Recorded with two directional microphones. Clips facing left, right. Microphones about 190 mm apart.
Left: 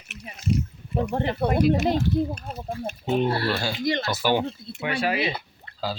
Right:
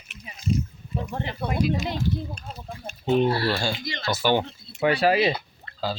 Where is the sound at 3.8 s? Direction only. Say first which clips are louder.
Left 10 dB; 55° left (ahead or behind).